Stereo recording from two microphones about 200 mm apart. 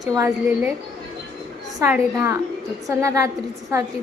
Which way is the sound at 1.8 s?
15° right (ahead or behind).